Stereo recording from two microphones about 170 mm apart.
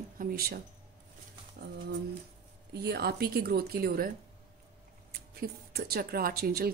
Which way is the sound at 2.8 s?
70° right (ahead or behind).